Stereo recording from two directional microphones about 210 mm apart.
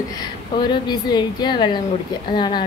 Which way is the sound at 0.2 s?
20° left (ahead or behind).